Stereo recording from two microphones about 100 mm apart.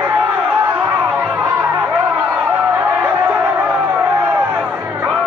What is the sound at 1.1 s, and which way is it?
Chatter, 15° right (ahead or behind).